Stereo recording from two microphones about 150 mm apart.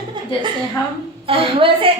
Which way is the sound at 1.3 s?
35° right (ahead or behind).